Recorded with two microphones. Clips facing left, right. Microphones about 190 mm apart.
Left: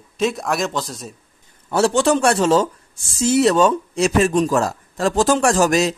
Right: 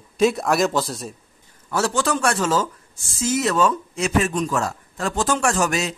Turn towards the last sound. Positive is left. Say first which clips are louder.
# left 6 dB
turn(degrees=35)  # may be behind; listen again after turning